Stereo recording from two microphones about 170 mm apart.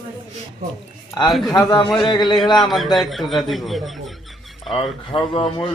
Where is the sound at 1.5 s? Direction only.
20° left (ahead or behind).